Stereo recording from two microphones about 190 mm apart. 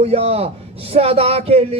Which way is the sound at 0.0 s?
35° right (ahead or behind).